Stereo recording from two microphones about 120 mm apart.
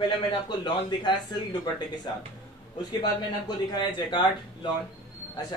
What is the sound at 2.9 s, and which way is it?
Speech, 35° left (ahead or behind).